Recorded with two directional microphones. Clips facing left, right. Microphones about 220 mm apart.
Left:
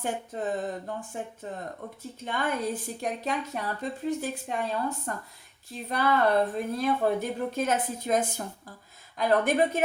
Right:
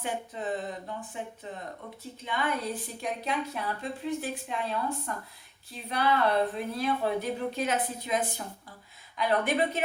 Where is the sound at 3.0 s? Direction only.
45° left (ahead or behind).